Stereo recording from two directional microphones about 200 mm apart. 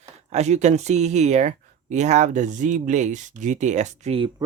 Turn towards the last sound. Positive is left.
turn(degrees=-30)  # may be behind; listen again after turning